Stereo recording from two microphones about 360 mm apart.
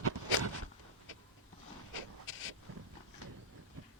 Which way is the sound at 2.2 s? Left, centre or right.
Left.